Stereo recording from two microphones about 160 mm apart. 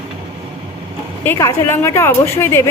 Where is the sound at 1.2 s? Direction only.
15° left (ahead or behind).